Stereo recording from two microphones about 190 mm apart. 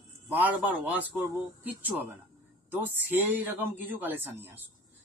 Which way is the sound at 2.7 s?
10° right (ahead or behind).